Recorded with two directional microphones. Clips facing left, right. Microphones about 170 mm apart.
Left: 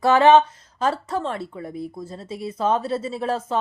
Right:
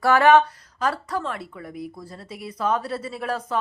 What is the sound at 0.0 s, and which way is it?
A woman's voice, 20° left (ahead or behind).